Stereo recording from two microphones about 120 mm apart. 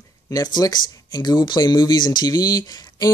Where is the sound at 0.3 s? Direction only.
35° left (ahead or behind).